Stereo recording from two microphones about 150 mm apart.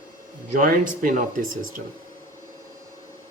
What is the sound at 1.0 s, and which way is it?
Speech, 65° right (ahead or behind).